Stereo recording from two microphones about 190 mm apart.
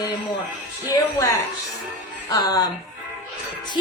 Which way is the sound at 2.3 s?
20° left (ahead or behind).